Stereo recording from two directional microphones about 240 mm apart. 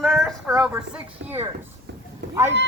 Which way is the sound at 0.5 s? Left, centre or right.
Centre.